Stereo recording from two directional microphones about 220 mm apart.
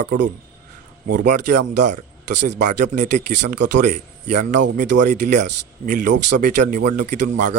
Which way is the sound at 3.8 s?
35° right (ahead or behind).